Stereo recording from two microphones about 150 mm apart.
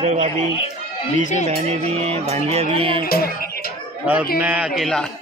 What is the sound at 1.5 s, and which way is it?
Music, 45° right (ahead or behind).